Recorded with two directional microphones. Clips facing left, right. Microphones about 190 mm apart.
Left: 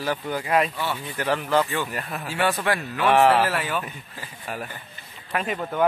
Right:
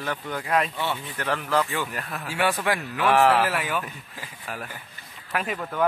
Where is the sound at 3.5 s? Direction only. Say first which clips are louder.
Left 1 dB; 10° right (ahead or behind).